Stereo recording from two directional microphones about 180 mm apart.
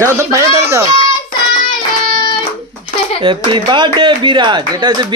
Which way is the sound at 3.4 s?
25° right (ahead or behind).